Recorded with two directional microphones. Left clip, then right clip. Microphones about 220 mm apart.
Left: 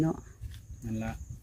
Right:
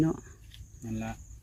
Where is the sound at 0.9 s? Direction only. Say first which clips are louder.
Even; 5° left (ahead or behind).